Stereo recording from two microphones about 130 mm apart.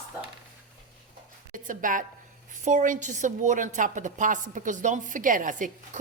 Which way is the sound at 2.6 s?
75° right (ahead or behind).